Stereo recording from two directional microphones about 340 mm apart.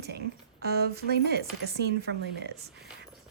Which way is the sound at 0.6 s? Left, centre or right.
Right.